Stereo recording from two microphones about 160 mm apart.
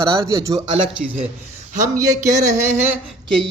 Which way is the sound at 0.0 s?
20° right (ahead or behind).